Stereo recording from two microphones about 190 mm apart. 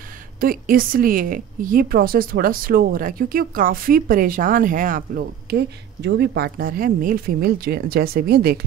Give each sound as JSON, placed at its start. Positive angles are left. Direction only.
{"t": 0.4, "sound": "a woman's voice", "side_deg": -50}